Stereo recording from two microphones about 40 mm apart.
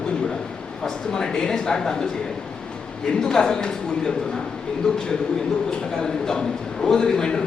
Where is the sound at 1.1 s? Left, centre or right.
Centre.